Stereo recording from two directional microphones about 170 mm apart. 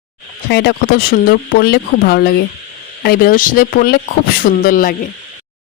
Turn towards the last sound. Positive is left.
turn(degrees=55)  # may be behind; listen again after turning